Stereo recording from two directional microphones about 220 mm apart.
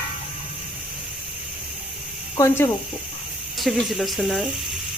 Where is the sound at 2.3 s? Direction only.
15° left (ahead or behind).